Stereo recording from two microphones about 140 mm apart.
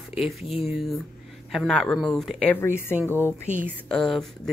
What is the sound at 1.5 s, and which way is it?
Speech, centre (ahead or behind).